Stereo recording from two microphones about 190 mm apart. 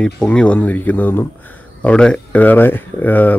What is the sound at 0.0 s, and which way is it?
Speech, 5° left (ahead or behind).